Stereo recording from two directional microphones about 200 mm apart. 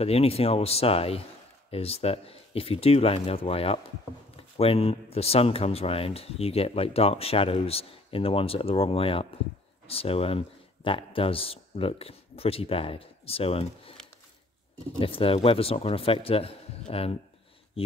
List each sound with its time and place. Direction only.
0.0 s speech: 30° left (ahead or behind)
15.0 s speech: 25° left (ahead or behind)